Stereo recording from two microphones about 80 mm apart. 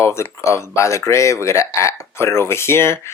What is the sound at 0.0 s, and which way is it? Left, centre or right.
Speech, left.